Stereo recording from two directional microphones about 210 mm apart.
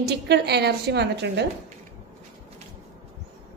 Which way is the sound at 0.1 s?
50° right (ahead or behind).